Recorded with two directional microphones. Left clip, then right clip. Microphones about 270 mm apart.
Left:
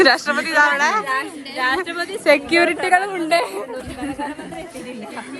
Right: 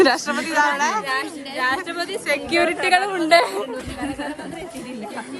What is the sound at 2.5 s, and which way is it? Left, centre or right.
Speech, left.